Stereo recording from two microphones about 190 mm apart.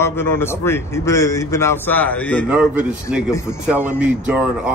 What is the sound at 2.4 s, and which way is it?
A man's voice, 10° right (ahead or behind).